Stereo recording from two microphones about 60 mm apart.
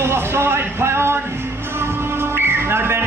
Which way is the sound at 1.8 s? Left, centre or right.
Right.